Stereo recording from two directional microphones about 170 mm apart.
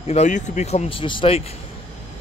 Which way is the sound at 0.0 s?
40° left (ahead or behind).